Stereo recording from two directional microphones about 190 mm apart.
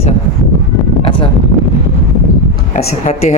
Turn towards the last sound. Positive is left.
turn(degrees=35)  # may be behind; listen again after turning